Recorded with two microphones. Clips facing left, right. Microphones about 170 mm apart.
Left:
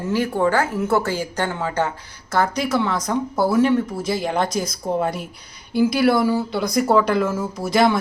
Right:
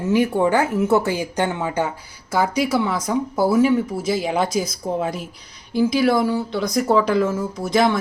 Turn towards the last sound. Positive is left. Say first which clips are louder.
# left 1 dB
turn(degrees=0)  # may be behind; listen again after turning